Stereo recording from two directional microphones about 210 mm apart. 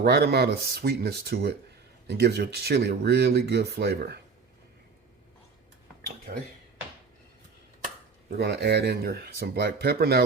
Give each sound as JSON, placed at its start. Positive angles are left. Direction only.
{"t": 0.0, "sound": "speech", "side_deg": -50}
{"t": 8.4, "sound": "speech", "side_deg": -55}